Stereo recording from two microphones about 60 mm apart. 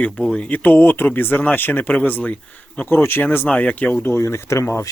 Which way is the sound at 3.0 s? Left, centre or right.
Left.